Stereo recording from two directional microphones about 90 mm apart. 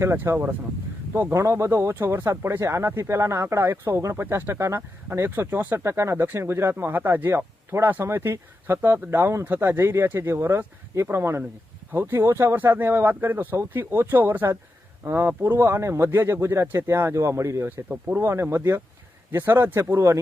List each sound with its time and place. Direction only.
0.0 s speech: 30° right (ahead or behind)
19.8 s speech: 35° right (ahead or behind)